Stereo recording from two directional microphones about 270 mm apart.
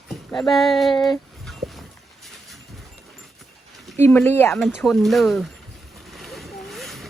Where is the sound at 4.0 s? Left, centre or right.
Centre.